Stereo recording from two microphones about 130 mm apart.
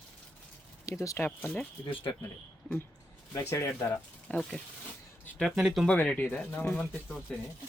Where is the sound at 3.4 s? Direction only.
20° left (ahead or behind).